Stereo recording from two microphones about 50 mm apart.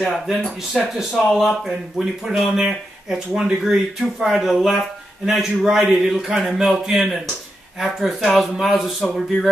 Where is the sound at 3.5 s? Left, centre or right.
Centre.